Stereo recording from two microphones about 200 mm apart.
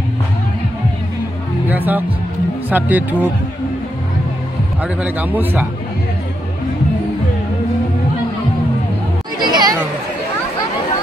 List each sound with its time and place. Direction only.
1.7 s music: 10° right (ahead or behind)
2.7 s speech: 10° right (ahead or behind)
4.8 s speech: 10° right (ahead or behind)
9.4 s speech: 20° right (ahead or behind)